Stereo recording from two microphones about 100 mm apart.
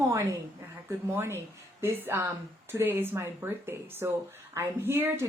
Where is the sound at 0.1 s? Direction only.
30° right (ahead or behind).